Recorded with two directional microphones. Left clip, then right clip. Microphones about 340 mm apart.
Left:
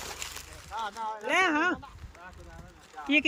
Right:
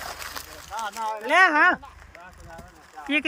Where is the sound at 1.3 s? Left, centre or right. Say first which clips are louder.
Right 8 dB; centre.